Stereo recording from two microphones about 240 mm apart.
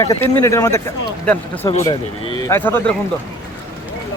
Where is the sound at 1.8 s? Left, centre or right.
Centre.